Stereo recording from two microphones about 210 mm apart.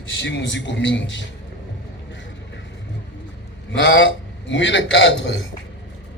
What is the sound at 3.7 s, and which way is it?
A man's voice, 60° left (ahead or behind).